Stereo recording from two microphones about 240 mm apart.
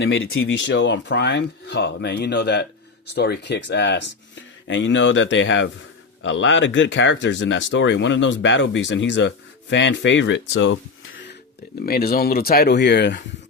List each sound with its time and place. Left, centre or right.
0.0 s speech: left
11.8 s speech: left